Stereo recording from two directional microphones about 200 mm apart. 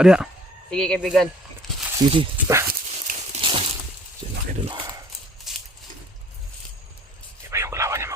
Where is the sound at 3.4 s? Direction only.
25° right (ahead or behind).